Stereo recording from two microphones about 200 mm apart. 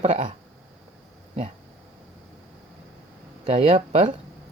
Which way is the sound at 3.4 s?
35° right (ahead or behind).